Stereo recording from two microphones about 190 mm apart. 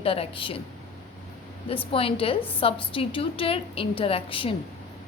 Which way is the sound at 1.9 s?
30° left (ahead or behind).